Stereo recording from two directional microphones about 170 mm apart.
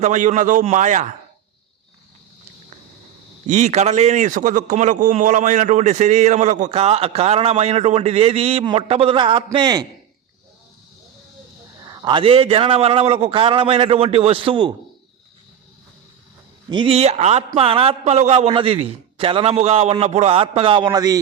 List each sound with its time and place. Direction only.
0.0 s a man's voice: 45° right (ahead or behind)
3.4 s a man's voice: 45° right (ahead or behind); by 9.8 s 25° right (ahead or behind)
11.8 s a man's voice: 25° right (ahead or behind)
16.6 s a man's voice: 30° right (ahead or behind)